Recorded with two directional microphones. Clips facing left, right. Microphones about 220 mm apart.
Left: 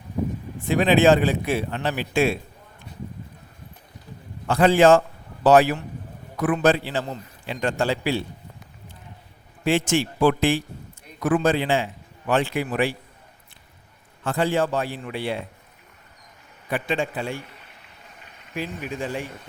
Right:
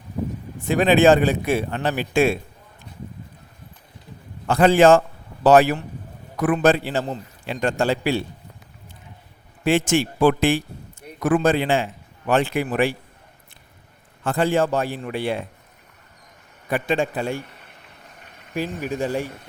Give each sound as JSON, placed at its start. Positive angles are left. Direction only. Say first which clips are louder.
{"t": 0.7, "sound": "a man's voice", "louder": "right 2 dB", "side_deg": -50}
{"t": 4.4, "sound": "a man's voice", "louder": "right 2 dB", "side_deg": -50}
{"t": 9.6, "sound": "a man's voice", "louder": "right 2 dB", "side_deg": -50}
{"t": 14.3, "sound": "a man's voice", "louder": "right 2 dB", "side_deg": -50}
{"t": 16.6, "sound": "a man's voice", "louder": "right 3 dB", "side_deg": -45}
{"t": 18.5, "sound": "speech", "louder": "right 4 dB", "side_deg": -40}